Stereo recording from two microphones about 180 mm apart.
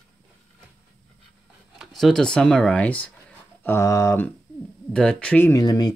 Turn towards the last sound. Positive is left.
turn(degrees=20)  # may be behind; listen again after turning